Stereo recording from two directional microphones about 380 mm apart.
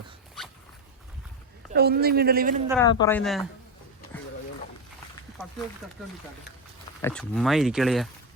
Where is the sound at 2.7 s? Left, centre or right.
Centre.